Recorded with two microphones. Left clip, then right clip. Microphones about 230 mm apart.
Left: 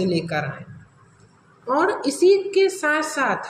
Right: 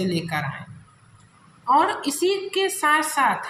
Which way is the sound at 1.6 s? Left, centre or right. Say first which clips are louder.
Right 1 dB; right.